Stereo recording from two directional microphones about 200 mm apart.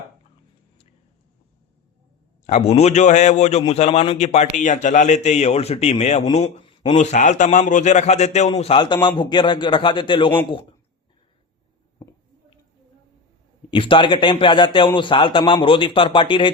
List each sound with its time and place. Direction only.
2.5 s a man's voice: 35° left (ahead or behind)
12.0 s a sound: 15° left (ahead or behind)
13.7 s a man's voice: 25° left (ahead or behind)